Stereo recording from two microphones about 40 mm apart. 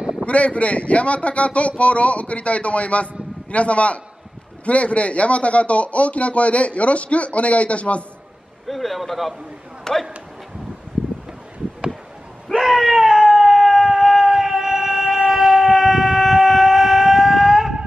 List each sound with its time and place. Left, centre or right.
0.2 s speech: left
8.6 s speech: centre
12.5 s screaming: centre
13.9 s music: centre
15.2 s siren: centre